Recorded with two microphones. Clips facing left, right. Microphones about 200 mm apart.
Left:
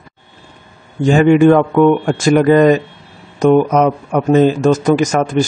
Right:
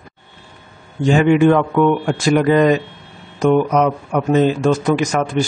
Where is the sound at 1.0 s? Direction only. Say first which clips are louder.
Left 3 dB; 45° left (ahead or behind).